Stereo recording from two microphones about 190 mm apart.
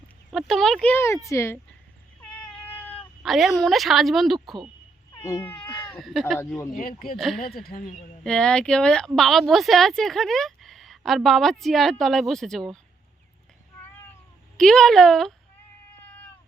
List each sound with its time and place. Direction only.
0.3 s speech: centre (ahead or behind)
2.3 s cat: 5° left (ahead or behind)
5.1 s speech: 15° left (ahead or behind); by 6.4 s centre (ahead or behind)
6.4 s speech: 10° left (ahead or behind)
6.7 s speech: 50° left (ahead or behind)
8.2 s speech: 5° left (ahead or behind)
14.6 s speech: 5° left (ahead or behind)